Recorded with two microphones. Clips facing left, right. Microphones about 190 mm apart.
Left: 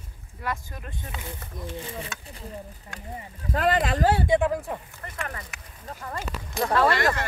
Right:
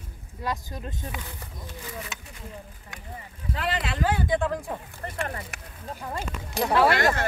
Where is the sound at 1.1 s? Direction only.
25° left (ahead or behind).